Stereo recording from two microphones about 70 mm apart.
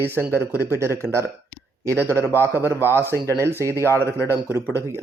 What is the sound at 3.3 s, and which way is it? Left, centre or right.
Speech, right.